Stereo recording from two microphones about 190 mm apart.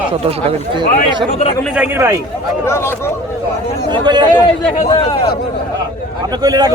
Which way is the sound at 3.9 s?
25° right (ahead or behind).